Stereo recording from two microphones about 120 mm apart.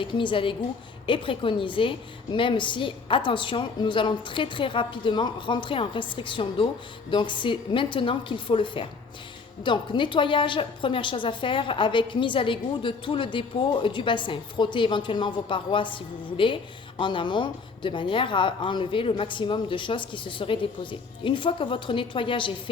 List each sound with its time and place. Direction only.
0.0 s a woman's voice: 45° left (ahead or behind)
17.0 s a woman's voice: 40° left (ahead or behind)